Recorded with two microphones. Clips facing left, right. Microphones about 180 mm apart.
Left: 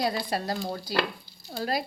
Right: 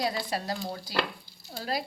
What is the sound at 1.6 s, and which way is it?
Speech, 50° left (ahead or behind).